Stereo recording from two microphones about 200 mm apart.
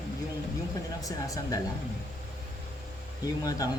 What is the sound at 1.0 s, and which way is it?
Speech, 15° left (ahead or behind).